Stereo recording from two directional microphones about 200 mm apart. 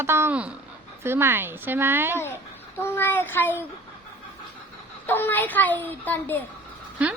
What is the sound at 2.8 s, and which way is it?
Speech, 10° left (ahead or behind).